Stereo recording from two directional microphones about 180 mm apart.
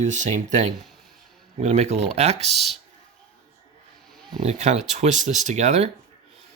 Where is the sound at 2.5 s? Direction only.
Centre (ahead or behind).